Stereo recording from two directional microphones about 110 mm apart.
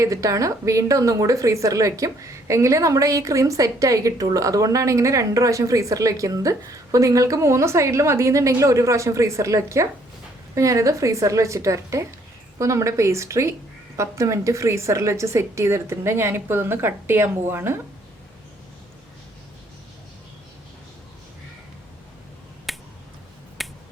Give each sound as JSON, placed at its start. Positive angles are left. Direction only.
{"t": 0.0, "sound": "a woman's voice", "side_deg": -30}
{"t": 22.7, "sound": "finger snapping", "side_deg": 0}